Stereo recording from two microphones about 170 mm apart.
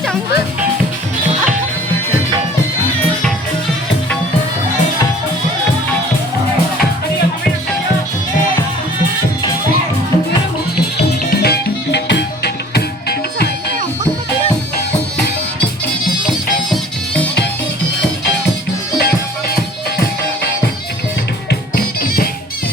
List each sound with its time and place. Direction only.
11.3 s music: 70° left (ahead or behind)
21.8 s music: 65° left (ahead or behind)